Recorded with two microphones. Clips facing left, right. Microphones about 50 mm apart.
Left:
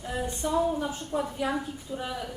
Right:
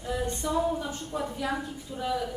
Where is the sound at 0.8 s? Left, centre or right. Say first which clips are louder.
Left 3 dB; centre.